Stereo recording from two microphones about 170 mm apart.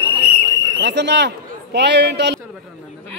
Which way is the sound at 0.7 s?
90° right.